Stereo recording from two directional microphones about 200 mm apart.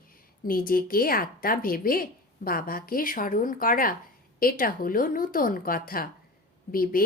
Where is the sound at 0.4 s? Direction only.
45° left (ahead or behind).